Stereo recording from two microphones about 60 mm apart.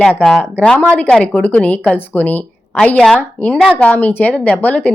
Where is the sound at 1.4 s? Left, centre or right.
Left.